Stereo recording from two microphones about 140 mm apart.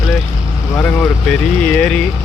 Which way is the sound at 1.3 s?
5° left (ahead or behind).